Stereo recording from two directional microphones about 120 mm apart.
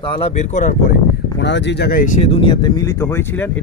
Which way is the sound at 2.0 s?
90° left.